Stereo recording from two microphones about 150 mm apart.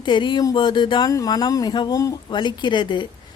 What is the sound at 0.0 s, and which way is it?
A woman's voice, 30° left (ahead or behind).